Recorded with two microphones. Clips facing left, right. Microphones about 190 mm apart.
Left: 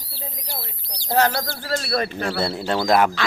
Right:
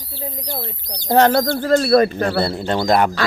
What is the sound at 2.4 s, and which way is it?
Speech, centre (ahead or behind).